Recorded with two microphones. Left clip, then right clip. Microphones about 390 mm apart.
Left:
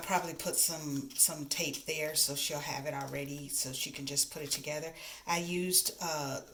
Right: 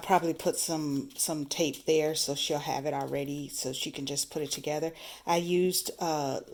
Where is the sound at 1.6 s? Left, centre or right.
Centre.